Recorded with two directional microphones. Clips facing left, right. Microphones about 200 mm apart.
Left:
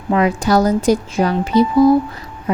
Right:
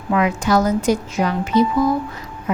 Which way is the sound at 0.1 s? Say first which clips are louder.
Left 3 dB; 35° left (ahead or behind).